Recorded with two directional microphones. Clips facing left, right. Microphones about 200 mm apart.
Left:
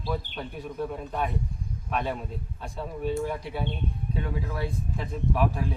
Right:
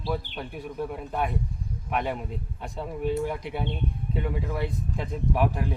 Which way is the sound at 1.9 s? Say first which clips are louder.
Right 1 dB; 15° right (ahead or behind).